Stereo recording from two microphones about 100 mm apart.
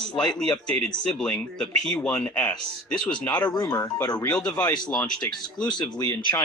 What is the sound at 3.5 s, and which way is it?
Speech, 40° left (ahead or behind).